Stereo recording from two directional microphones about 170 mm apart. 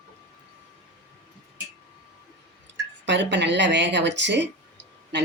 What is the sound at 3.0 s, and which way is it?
Speech, 90° right.